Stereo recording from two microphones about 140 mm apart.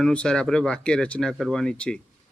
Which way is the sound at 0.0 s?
5° left (ahead or behind).